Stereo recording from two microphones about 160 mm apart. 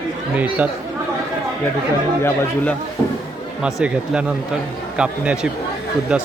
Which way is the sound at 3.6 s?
5° right (ahead or behind).